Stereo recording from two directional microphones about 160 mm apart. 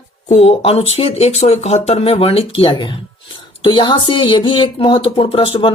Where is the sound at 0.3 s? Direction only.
45° left (ahead or behind).